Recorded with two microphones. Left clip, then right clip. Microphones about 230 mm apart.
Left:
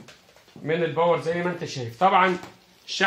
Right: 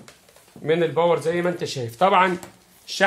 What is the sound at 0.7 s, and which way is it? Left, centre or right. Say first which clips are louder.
Speech: right 3 dB; right.